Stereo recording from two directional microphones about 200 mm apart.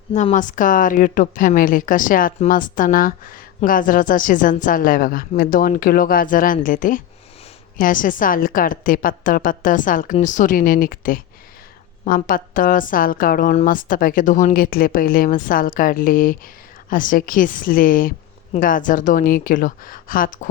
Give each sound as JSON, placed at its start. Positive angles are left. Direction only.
{"t": 0.1, "sound": "a woman's voice", "side_deg": 35}